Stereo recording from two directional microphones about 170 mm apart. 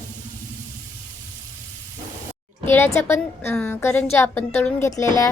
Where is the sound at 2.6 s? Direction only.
15° left (ahead or behind).